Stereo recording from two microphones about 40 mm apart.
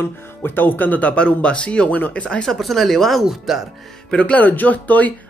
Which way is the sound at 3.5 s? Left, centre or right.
Centre.